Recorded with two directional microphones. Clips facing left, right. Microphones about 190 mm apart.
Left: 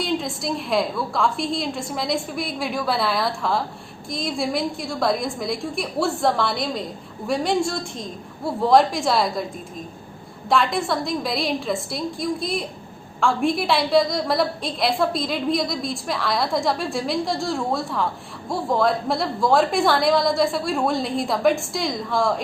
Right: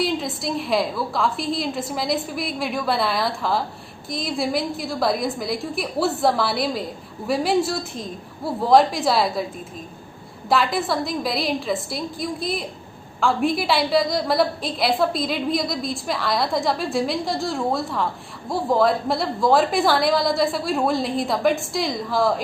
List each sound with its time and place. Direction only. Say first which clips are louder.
0.0 s a woman's voice: right 1 dB; centre (ahead or behind)
10.5 s a woman's voice: even; centre (ahead or behind)